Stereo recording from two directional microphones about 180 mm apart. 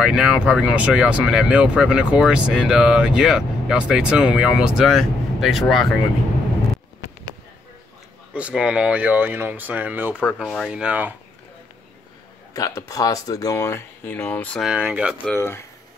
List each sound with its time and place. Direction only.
0.0 s speech: 5° right (ahead or behind)
8.3 s speech: 5° right (ahead or behind)
12.5 s speech: 20° left (ahead or behind)
14.7 s speech: 5° right (ahead or behind)
15.1 s speech: 10° left (ahead or behind)